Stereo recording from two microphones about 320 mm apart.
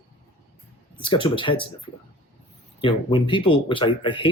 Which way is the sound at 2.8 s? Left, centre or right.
Centre.